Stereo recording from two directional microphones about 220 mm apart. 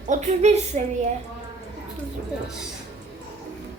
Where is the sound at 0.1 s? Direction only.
30° right (ahead or behind).